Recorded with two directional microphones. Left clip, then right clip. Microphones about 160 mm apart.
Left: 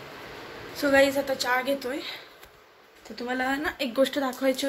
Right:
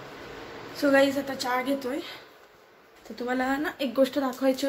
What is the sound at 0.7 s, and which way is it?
A woman's voice, 10° right (ahead or behind).